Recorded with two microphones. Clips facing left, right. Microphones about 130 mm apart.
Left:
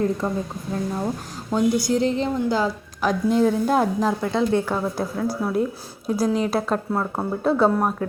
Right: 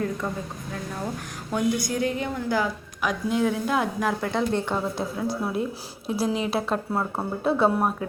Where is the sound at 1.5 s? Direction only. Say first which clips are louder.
Left 5 dB; 25° left (ahead or behind).